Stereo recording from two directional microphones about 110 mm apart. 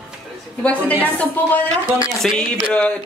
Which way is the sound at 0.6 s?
15° left (ahead or behind).